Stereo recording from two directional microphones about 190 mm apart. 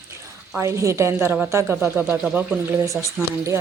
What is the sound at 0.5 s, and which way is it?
A woman's voice, 15° right (ahead or behind).